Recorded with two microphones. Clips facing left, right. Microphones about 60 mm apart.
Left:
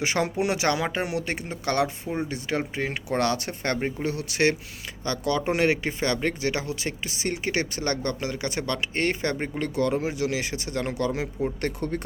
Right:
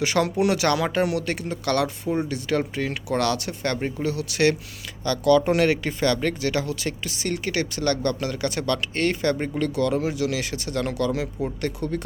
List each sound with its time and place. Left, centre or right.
0.0 s speech: left
3.8 s speech: centre
4.0 s speech: left